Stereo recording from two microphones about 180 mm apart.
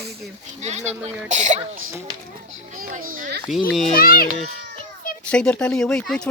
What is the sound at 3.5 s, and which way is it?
Speech, centre (ahead or behind).